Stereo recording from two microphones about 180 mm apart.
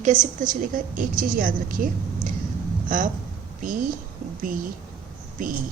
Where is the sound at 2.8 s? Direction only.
50° right (ahead or behind).